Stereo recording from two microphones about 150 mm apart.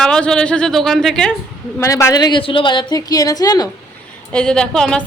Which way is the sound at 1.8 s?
20° left (ahead or behind).